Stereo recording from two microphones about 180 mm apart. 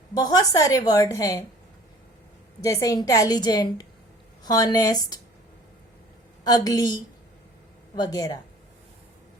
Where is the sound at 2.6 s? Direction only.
20° left (ahead or behind).